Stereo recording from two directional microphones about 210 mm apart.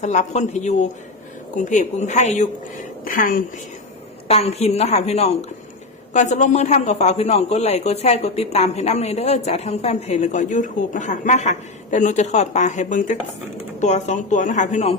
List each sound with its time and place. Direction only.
0.0 s a man's voice: 35° left (ahead or behind)
4.3 s a man's voice: 30° left (ahead or behind)